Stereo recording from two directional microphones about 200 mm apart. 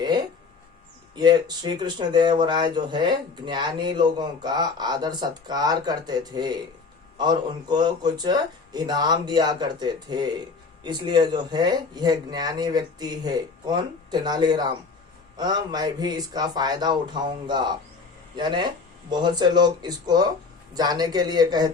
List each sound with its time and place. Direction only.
1.1 s speech: 20° right (ahead or behind)